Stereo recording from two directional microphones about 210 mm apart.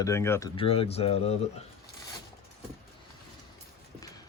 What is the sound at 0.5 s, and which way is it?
Speech, 25° left (ahead or behind).